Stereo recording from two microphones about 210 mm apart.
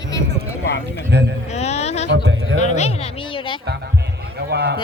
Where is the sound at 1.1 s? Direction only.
55° right (ahead or behind).